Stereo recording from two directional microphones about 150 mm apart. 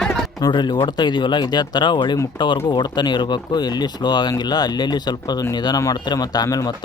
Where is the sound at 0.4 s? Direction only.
30° left (ahead or behind).